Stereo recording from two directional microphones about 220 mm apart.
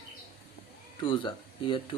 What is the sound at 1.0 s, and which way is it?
Speech, 25° left (ahead or behind).